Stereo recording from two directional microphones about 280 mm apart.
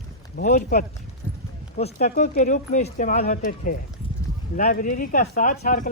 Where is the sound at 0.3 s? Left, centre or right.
Left.